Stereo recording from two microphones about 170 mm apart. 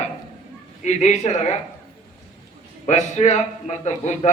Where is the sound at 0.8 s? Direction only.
45° left (ahead or behind).